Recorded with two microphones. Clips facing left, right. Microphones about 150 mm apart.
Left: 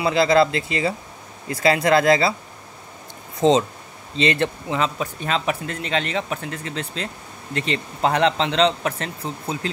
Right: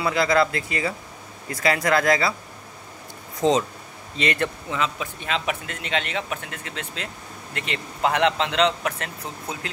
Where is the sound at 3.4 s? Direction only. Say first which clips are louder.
Left 3 dB; 25° left (ahead or behind).